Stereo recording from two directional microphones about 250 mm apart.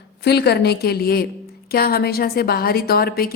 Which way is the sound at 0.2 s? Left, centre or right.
Left.